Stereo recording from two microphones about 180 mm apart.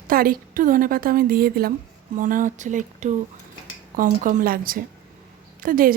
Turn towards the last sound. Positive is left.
turn(degrees=-50)  # may be behind; listen again after turning